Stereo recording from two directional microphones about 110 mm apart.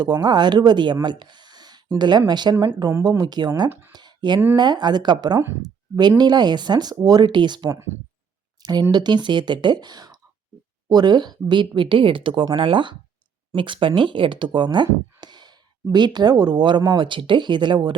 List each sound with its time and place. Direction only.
0.0 s speech: 40° right (ahead or behind)
1.0 s a sound: 45° right (ahead or behind)
2.0 s speech: 40° right (ahead or behind)
3.7 s speech: 20° right (ahead or behind)
3.9 s a sound: 40° right (ahead or behind)
4.5 s speech: 40° right (ahead or behind)